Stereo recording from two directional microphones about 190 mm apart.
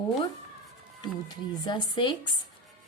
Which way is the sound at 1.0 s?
20° left (ahead or behind).